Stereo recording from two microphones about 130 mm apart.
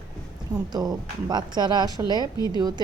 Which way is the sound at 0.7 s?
30° right (ahead or behind).